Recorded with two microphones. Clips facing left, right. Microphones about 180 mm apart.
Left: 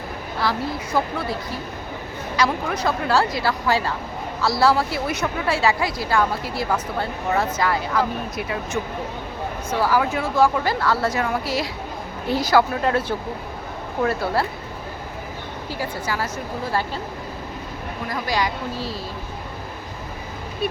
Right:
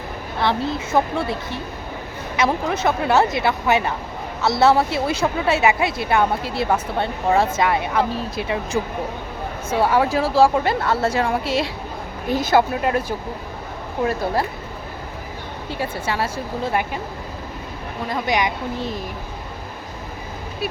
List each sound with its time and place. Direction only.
0.3 s a woman's voice: 25° right (ahead or behind)
12.8 s speech: 10° right (ahead or behind)
15.7 s a woman's voice: 25° right (ahead or behind)
18.1 s a woman's voice: 20° right (ahead or behind)